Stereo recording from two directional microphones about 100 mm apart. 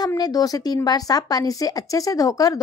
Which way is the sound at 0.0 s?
40° left (ahead or behind).